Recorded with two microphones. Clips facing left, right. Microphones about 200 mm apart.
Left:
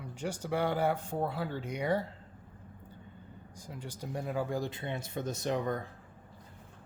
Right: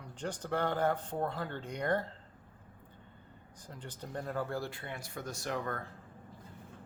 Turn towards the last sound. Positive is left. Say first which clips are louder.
# left 5 dB
turn(degrees=15)  # may be behind; listen again after turning